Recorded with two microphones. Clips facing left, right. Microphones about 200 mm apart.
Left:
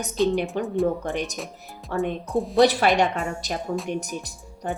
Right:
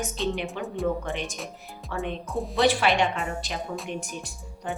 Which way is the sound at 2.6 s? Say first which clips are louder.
Left 4 dB; 40° left (ahead or behind).